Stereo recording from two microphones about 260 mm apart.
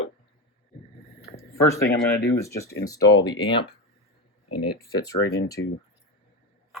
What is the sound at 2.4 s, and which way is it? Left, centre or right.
Speech, centre.